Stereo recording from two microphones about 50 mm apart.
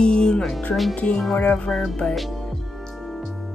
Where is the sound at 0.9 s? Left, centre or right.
Left.